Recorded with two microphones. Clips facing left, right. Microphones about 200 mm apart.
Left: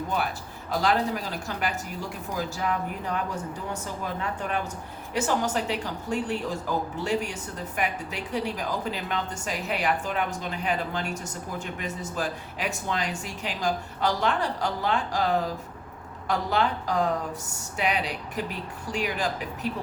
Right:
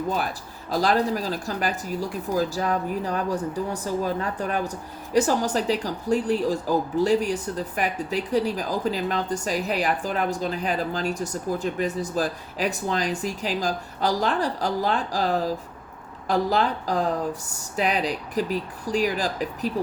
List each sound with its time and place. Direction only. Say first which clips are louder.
0.7 s speech: right 3 dB; 35° right (ahead or behind)